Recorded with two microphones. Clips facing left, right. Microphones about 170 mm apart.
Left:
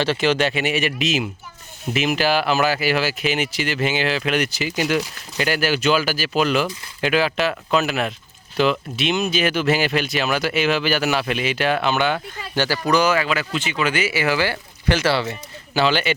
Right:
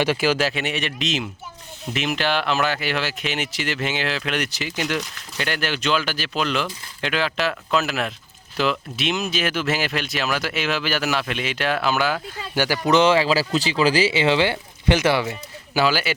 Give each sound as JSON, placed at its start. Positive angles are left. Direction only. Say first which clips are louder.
{"t": 0.0, "sound": "speech", "louder": "left 1 dB", "side_deg": -10}
{"t": 12.6, "sound": "speech", "louder": "right 2 dB", "side_deg": -15}